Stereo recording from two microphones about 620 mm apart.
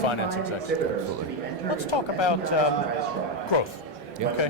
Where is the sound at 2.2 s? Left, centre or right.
Left.